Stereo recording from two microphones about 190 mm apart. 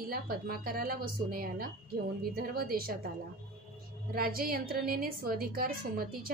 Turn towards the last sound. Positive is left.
turn(degrees=-50)  # may be behind; listen again after turning